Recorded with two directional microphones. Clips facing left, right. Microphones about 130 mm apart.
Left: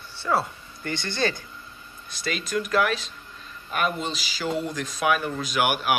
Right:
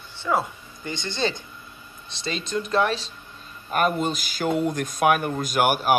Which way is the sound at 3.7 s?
45° right (ahead or behind).